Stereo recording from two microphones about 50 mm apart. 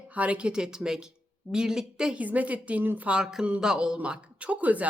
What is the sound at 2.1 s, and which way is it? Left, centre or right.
Speech, right.